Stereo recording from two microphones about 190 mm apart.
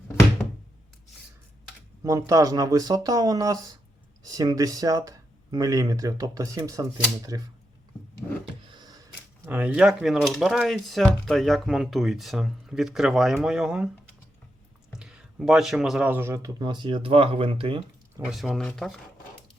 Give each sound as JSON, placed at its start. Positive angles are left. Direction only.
{"t": 2.0, "sound": "speech", "side_deg": -15}
{"t": 8.6, "sound": "a sound", "side_deg": -25}
{"t": 9.5, "sound": "speech", "side_deg": -5}
{"t": 14.9, "sound": "speech", "side_deg": -5}
{"t": 18.2, "sound": "speech", "side_deg": -5}